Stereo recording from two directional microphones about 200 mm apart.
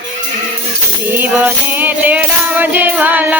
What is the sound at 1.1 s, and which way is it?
Music, 10° right (ahead or behind).